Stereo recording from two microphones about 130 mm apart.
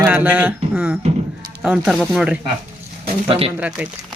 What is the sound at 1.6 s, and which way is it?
Speech, 5° right (ahead or behind).